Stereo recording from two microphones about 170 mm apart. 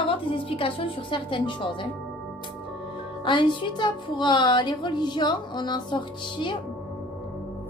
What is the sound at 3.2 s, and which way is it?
A woman's voice, 30° left (ahead or behind).